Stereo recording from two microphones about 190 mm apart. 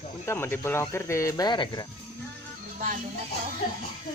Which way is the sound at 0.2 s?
15° left (ahead or behind).